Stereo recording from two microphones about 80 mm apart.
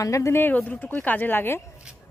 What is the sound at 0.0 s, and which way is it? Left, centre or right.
Speech, left.